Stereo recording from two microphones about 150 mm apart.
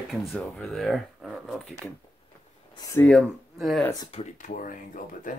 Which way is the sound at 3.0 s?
5° left (ahead or behind).